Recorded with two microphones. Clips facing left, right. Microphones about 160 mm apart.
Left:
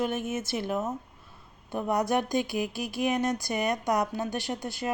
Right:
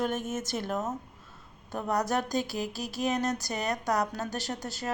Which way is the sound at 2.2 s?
35° right (ahead or behind).